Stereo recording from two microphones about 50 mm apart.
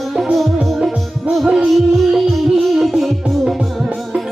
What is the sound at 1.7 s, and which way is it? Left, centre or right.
Music, centre.